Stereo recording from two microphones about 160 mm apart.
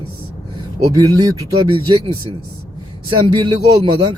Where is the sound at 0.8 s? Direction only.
20° right (ahead or behind).